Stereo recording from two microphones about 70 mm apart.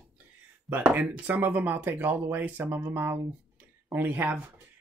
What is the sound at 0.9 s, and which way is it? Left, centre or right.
Speech, right.